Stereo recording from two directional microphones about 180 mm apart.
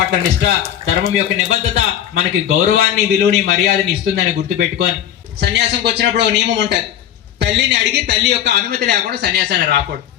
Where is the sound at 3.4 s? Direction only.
65° right (ahead or behind).